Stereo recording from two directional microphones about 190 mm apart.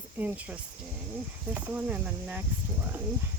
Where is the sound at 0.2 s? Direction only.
10° right (ahead or behind).